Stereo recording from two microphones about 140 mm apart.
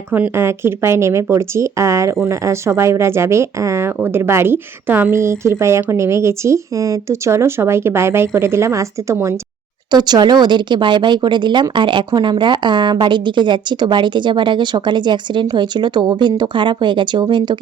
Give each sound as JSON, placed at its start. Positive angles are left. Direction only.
{"t": 0.1, "sound": "speech", "side_deg": -15}